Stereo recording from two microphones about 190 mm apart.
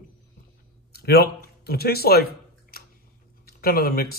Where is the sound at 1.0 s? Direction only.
55° left (ahead or behind).